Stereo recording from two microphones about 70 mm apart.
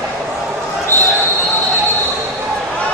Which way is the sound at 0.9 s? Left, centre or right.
Left.